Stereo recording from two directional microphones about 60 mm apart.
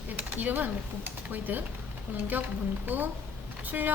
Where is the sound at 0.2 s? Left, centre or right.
Right.